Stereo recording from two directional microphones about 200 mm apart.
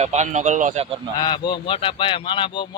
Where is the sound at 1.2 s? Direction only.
20° left (ahead or behind).